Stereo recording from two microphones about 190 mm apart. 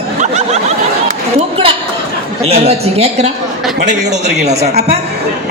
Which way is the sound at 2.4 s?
35° right (ahead or behind).